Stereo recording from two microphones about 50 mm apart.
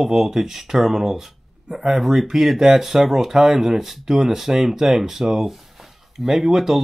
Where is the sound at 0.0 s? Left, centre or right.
Centre.